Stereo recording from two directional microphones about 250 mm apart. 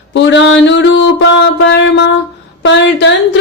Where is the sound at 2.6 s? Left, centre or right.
Left.